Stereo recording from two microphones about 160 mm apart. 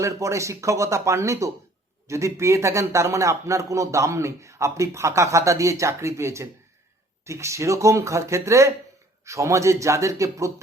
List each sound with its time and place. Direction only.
0.0 s a man's voice: 20° right (ahead or behind)